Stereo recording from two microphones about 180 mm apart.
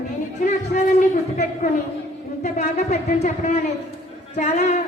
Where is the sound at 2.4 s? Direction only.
40° left (ahead or behind).